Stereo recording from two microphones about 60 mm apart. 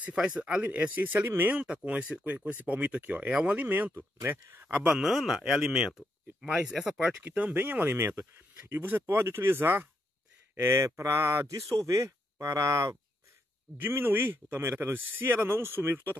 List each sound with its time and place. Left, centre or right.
0.1 s speech: centre; by 4.7 s right
4.9 s speech: centre
7.2 s speech: right
10.7 s speech: right
13.7 s speech: right